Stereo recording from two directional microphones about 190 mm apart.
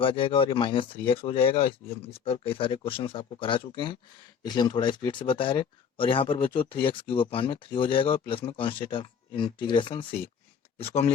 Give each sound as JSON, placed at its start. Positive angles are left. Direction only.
{"t": 0.0, "sound": "speech", "side_deg": 25}